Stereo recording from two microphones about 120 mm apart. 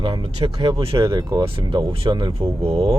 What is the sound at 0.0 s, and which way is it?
Speech, 50° right (ahead or behind).